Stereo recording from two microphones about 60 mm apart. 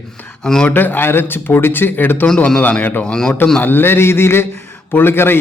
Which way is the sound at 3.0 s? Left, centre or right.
Centre.